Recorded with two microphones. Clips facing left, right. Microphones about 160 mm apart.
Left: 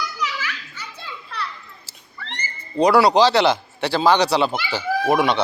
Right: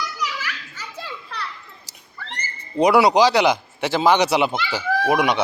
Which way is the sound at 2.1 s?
Centre (ahead or behind).